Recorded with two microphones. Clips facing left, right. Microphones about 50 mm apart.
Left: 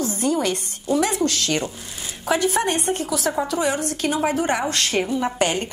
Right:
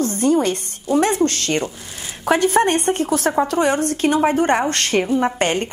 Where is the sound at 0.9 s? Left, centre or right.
Right.